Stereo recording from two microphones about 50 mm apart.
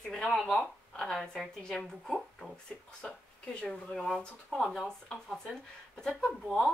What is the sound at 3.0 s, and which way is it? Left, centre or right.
Speech, left.